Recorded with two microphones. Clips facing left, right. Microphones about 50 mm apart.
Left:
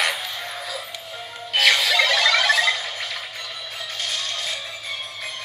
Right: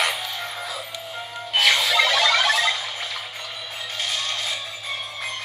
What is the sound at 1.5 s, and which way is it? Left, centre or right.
Music, centre.